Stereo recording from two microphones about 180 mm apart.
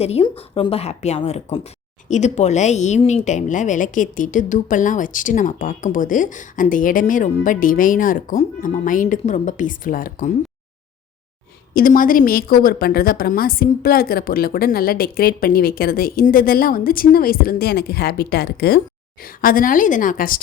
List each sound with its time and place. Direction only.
0.0 s speech: 35° left (ahead or behind)
11.7 s a woman's voice: 50° left (ahead or behind)